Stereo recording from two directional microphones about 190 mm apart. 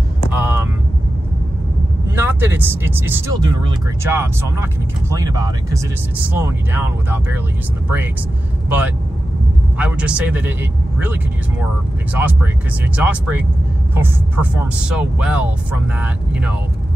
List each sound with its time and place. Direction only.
0.4 s vehicle: 10° right (ahead or behind)
2.1 s speech: 10° right (ahead or behind)
8.6 s speech: 10° right (ahead or behind)